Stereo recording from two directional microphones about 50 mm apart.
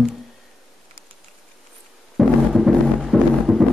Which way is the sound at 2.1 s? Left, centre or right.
Centre.